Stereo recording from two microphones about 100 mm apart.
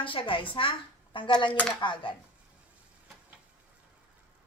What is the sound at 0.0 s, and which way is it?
Speech, 60° left (ahead or behind).